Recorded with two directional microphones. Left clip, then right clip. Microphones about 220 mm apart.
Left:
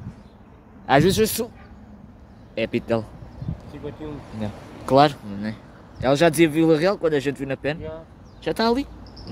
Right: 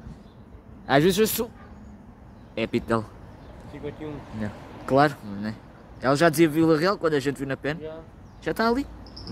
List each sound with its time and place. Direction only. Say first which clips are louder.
0.8 s speech: left 2 dB; centre (ahead or behind)
2.5 s speech: left 2 dB; 5° right (ahead or behind)
3.8 s speech: left 1 dB; 25° left (ahead or behind)
4.4 s speech: left 2 dB; 5° left (ahead or behind)